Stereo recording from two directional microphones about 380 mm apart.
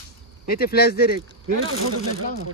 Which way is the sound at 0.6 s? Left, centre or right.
Left.